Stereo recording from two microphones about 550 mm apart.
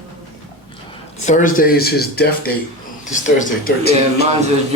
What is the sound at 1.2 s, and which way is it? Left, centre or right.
Speech, centre.